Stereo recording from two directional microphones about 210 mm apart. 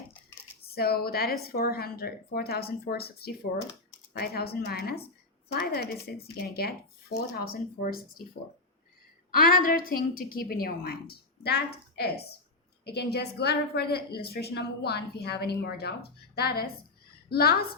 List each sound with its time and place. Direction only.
0.7 s a woman's voice: 50° left (ahead or behind)
9.3 s a woman's voice: 45° left (ahead or behind)